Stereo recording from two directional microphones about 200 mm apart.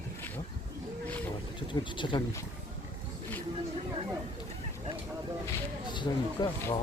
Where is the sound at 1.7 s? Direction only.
25° left (ahead or behind).